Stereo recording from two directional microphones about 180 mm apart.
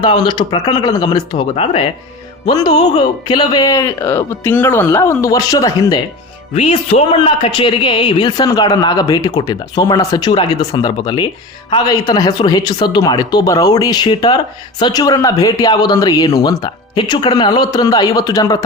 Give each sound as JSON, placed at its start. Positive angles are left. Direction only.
{"t": 0.0, "sound": "speech", "side_deg": 25}
{"t": 6.5, "sound": "a man's voice", "side_deg": 35}